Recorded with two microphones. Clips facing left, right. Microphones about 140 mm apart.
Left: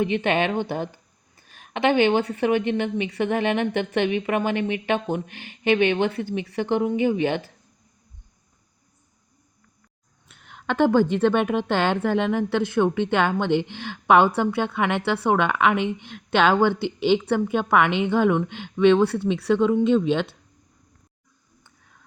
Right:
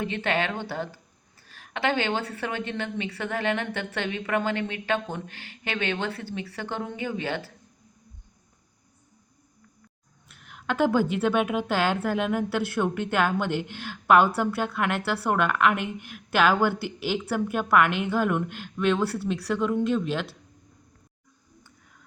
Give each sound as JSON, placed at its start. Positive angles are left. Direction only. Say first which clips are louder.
{"t": 0.0, "sound": "a woman's voice", "louder": "left 5 dB", "side_deg": 20}
{"t": 10.2, "sound": "a sound", "louder": "left 2 dB", "side_deg": 0}
{"t": 10.9, "sound": "a woman's voice", "louder": "left 4 dB", "side_deg": -5}